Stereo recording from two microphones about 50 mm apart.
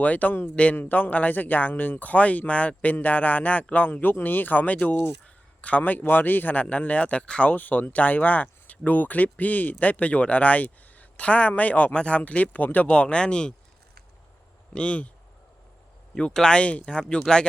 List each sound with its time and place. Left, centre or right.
0.0 s a man's voice: left
0.8 s a man's voice: left
5.8 s a man's voice: left
7.5 s a man's voice: left
12.9 s speech: left
14.8 s speech: left
16.1 s speech: centre